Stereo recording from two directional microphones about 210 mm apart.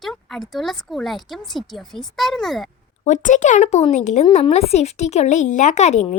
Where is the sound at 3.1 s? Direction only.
35° left (ahead or behind).